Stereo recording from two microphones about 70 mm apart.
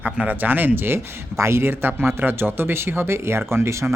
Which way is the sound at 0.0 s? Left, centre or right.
Right.